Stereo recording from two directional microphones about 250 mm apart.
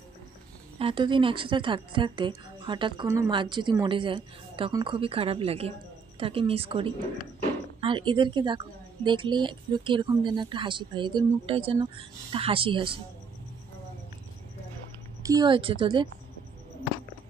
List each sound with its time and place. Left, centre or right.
0.7 s a woman's voice: right
15.2 s a woman's voice: centre